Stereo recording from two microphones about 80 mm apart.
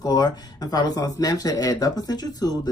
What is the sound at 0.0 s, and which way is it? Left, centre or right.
Speech, left.